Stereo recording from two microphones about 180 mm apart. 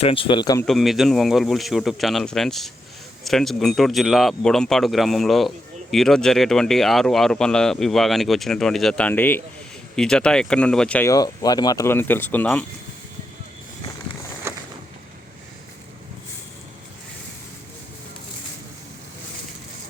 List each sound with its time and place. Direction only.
0.0 s a man's voice: 30° left (ahead or behind)
0.6 s speech: centre (ahead or behind)
11.1 s speech: 20° left (ahead or behind)
14.5 s a sound: 15° right (ahead or behind)